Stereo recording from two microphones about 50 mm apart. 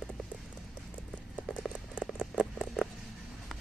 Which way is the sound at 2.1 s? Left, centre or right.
Right.